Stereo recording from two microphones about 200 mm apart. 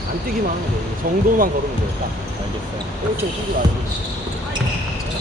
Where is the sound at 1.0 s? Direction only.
45° right (ahead or behind).